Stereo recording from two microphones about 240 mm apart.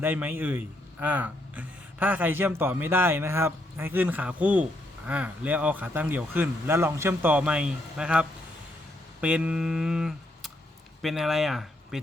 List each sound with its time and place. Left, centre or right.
0.0 s a man's voice: centre
9.2 s a sound: centre
11.0 s speech: centre